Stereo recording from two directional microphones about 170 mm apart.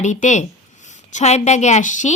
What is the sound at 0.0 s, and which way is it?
A woman's voice, 45° left (ahead or behind).